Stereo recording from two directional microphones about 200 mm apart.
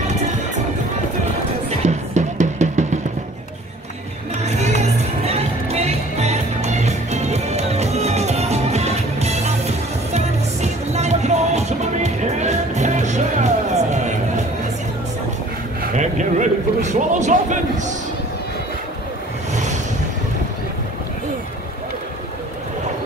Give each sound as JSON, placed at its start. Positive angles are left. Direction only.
{"t": 1.9, "sound": "music", "side_deg": -35}
{"t": 4.5, "sound": "music", "side_deg": -35}
{"t": 15.8, "sound": "a sound", "side_deg": -35}
{"t": 19.5, "sound": "vehicle", "side_deg": -35}